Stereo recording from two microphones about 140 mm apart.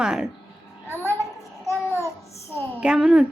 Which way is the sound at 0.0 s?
5° right (ahead or behind).